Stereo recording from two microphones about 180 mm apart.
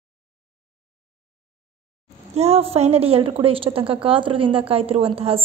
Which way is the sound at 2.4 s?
35° right (ahead or behind).